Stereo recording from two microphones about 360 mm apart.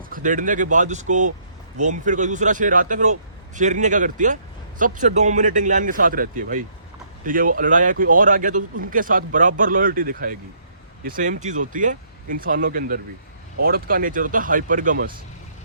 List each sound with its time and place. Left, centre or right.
0.1 s a man's voice: right